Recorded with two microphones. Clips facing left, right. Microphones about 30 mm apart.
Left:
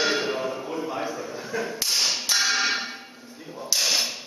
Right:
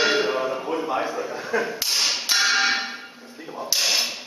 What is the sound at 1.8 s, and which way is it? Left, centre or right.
Music, centre.